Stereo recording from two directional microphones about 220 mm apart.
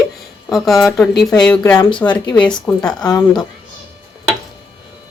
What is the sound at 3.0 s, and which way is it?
Speech, 15° left (ahead or behind).